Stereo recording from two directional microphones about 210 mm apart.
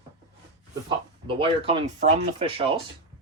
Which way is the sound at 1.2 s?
25° right (ahead or behind).